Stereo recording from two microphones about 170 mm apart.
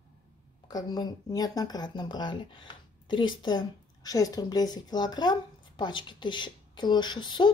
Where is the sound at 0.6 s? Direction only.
25° left (ahead or behind).